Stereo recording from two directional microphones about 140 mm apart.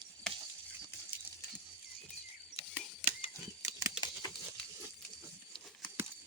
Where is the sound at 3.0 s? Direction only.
40° left (ahead or behind).